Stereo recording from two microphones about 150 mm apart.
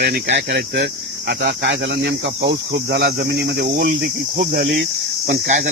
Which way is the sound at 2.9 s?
90° right.